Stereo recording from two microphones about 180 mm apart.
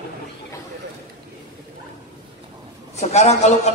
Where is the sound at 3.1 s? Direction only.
40° left (ahead or behind).